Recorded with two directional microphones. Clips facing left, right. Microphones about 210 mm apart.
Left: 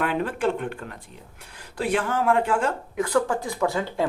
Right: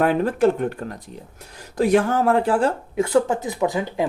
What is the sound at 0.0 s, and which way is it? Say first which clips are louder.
Speech: right 7 dB; 40° right (ahead or behind).